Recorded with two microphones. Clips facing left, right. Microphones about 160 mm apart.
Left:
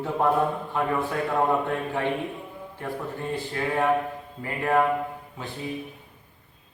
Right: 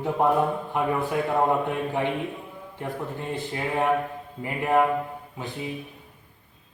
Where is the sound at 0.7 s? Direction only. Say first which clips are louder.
Right 1 dB; 15° right (ahead or behind).